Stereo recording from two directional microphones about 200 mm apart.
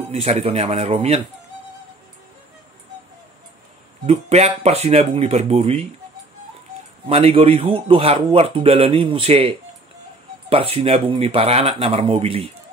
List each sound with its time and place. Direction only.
0.1 s speech: 30° right (ahead or behind)
4.0 s speech: 30° right (ahead or behind)
7.1 s speech: 30° right (ahead or behind)
10.5 s speech: 30° right (ahead or behind)